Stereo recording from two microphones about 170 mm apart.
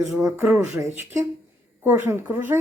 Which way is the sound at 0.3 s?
15° right (ahead or behind).